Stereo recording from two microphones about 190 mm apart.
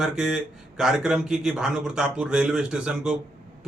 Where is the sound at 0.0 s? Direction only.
5° right (ahead or behind).